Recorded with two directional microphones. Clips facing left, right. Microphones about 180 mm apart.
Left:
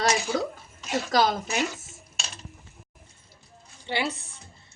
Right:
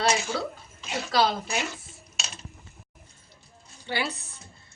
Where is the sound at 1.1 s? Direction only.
45° left (ahead or behind).